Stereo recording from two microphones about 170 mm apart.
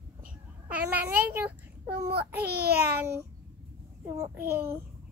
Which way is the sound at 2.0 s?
65° right (ahead or behind).